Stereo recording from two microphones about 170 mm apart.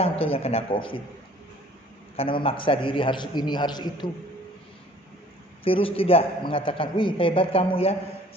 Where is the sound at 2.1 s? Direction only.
30° left (ahead or behind).